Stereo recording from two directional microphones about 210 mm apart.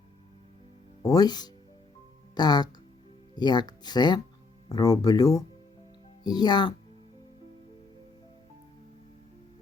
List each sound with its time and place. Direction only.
1.0 s speech: 20° left (ahead or behind)